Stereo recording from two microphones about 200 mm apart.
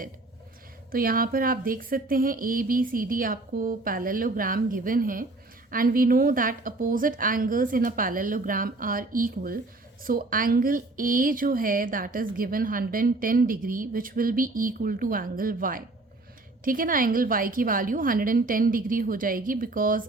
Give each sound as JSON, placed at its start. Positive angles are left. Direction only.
{"t": 0.9, "sound": "a woman's voice", "side_deg": -45}